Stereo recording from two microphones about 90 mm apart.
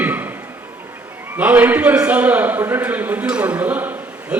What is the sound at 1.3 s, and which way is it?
A man's voice, 20° right (ahead or behind).